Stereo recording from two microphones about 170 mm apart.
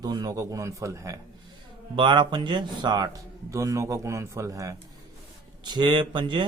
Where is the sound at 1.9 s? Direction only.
30° right (ahead or behind).